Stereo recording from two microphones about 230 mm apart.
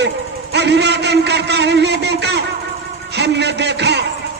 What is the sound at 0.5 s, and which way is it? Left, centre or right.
A man's voice, right.